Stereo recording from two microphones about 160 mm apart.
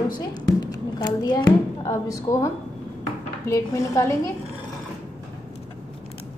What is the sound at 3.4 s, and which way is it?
Speech, 20° left (ahead or behind).